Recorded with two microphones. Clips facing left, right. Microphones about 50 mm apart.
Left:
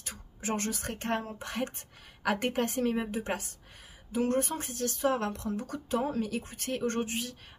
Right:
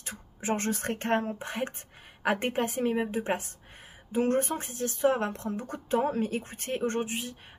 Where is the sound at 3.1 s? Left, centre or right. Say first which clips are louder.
Right 3 dB; right.